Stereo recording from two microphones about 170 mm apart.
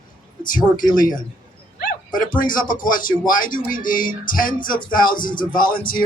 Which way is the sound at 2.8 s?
55° left (ahead or behind).